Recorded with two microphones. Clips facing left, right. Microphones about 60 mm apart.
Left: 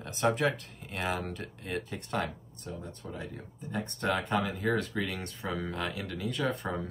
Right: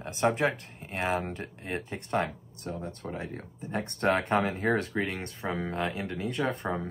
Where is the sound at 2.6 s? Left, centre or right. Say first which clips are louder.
Right 5 dB; right.